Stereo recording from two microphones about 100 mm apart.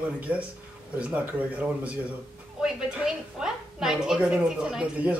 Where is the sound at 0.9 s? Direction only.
15° right (ahead or behind).